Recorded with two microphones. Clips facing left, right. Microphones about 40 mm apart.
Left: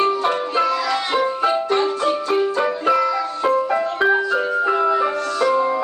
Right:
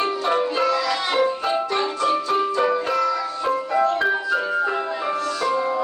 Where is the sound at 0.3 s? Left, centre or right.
Centre.